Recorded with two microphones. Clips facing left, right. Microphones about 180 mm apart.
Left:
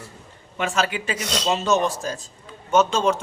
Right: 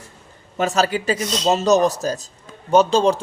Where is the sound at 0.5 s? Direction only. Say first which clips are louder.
Right 5 dB; 40° right (ahead or behind).